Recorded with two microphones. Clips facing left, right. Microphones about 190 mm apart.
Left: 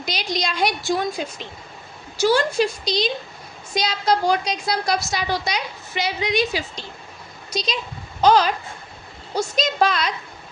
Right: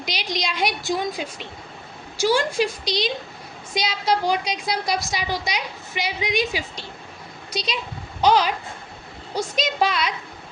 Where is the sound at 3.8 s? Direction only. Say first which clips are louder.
Left 2 dB; 40° left (ahead or behind).